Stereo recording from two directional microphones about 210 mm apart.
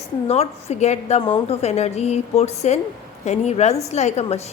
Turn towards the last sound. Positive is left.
turn(degrees=30)  # may be behind; listen again after turning